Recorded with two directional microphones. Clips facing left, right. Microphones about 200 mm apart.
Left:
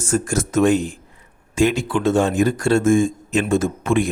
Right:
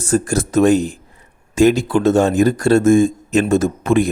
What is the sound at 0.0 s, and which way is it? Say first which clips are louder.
Speech: right 4 dB; 35° right (ahead or behind).